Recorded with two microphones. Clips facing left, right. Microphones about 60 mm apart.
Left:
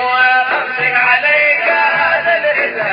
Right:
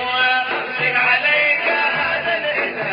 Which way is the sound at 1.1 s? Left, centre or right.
Left.